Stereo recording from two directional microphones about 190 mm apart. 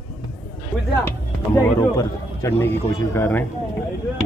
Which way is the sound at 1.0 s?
15° left (ahead or behind).